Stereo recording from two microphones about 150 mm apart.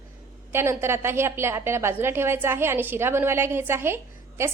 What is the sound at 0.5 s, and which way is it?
A woman's voice, 15° right (ahead or behind).